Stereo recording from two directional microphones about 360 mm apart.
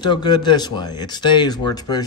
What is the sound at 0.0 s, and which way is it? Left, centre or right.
Speech, centre.